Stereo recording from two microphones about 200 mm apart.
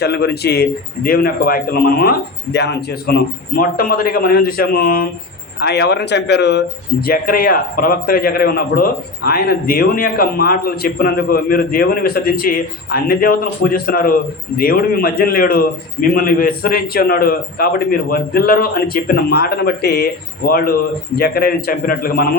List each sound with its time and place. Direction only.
0.0 s speech: 55° left (ahead or behind)